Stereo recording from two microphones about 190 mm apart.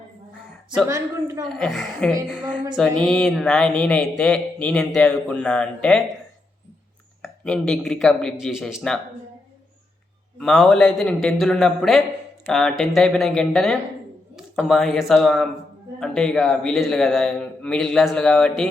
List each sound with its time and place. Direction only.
1.5 s speech: 5° left (ahead or behind)
2.4 s a woman's voice: 25° right (ahead or behind)
2.7 s speech: 5° left (ahead or behind)
7.2 s speech: 5° left (ahead or behind)
10.3 s speech: 5° left (ahead or behind)